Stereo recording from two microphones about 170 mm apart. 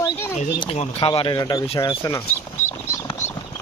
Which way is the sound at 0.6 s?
35° left (ahead or behind).